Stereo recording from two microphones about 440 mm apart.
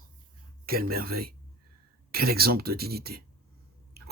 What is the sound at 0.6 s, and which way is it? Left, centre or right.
Speech, centre.